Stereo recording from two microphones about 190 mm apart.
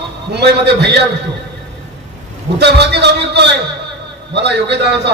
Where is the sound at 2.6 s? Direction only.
60° right (ahead or behind).